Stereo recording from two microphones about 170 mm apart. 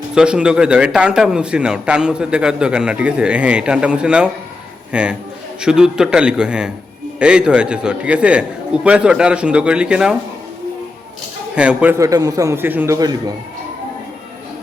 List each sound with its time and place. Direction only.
0.1 s a man's voice: 5° right (ahead or behind)
11.5 s a man's voice: 5° right (ahead or behind); by 13.3 s 20° right (ahead or behind)